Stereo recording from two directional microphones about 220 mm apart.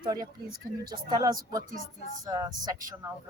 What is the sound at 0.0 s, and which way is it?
Speech, 15° right (ahead or behind).